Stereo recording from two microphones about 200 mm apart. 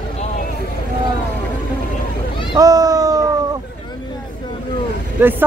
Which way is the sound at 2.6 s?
20° right (ahead or behind).